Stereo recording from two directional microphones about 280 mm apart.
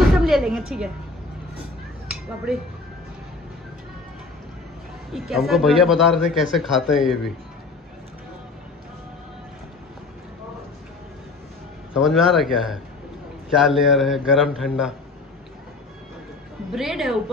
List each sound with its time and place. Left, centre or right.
0.1 s a woman's voice: centre
2.2 s a man's voice: centre
5.1 s a man's voice: centre
11.9 s a man's voice: centre
16.7 s a man's voice: centre